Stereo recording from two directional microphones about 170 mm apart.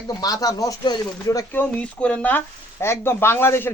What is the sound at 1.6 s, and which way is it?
Speech, 10° left (ahead or behind).